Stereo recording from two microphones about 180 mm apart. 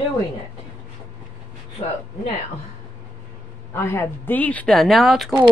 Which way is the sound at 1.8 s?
35° left (ahead or behind).